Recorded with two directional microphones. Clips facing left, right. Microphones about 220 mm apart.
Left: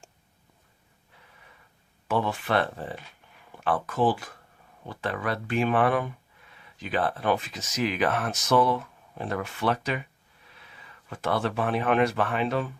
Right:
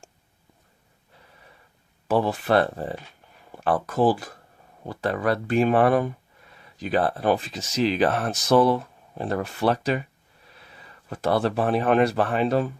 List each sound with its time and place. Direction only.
2.0 s speech: 35° right (ahead or behind)